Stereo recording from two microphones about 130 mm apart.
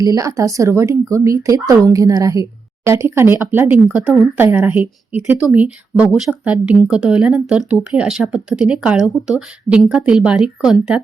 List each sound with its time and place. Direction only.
0.0 s a woman's voice: 25° right (ahead or behind); by 11.0 s 5° right (ahead or behind)